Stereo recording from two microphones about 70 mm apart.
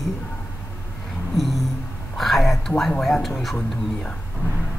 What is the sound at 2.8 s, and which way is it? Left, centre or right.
Speech, centre.